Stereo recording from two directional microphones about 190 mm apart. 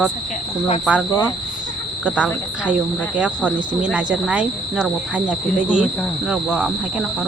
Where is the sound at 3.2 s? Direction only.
5° right (ahead or behind).